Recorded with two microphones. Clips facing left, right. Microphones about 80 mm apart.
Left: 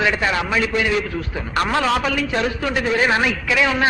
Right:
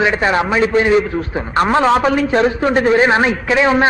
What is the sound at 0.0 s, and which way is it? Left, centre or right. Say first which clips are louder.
A man's voice: right 5 dB; right.